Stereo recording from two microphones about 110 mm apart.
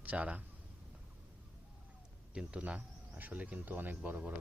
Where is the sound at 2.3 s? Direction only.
10° right (ahead or behind).